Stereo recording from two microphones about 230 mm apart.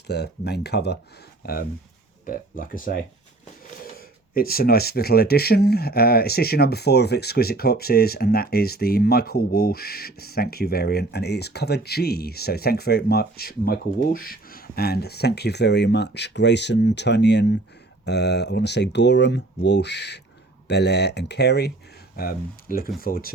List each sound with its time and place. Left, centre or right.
0.1 s speech: left